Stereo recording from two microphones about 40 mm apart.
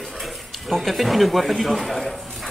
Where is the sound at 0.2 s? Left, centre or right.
Centre.